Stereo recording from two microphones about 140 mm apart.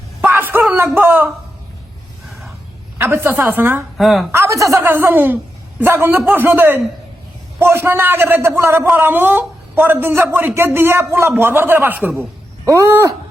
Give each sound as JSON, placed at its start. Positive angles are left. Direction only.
{"t": 0.3, "sound": "a sound", "side_deg": -15}
{"t": 0.6, "sound": "speech", "side_deg": -10}
{"t": 3.0, "sound": "a man's voice", "side_deg": -15}
{"t": 3.9, "sound": "a woman's voice", "side_deg": 0}
{"t": 4.3, "sound": "a man's voice", "side_deg": -20}